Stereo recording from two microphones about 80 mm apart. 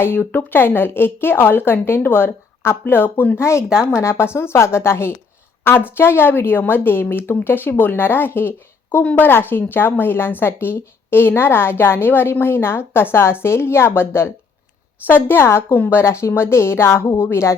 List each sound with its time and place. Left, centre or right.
0.0 s a woman's voice: left